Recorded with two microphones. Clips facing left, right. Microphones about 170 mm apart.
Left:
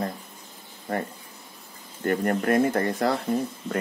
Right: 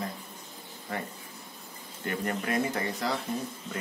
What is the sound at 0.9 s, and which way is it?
A man's voice, 50° left (ahead or behind).